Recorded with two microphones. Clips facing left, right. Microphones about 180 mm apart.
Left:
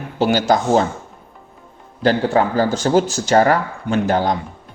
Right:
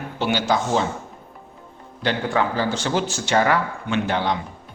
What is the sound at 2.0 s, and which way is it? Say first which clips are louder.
Speech: left 6 dB; 40° left (ahead or behind).